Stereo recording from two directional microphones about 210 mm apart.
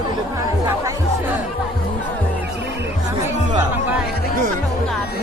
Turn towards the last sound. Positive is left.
turn(degrees=-10)  # may be behind; listen again after turning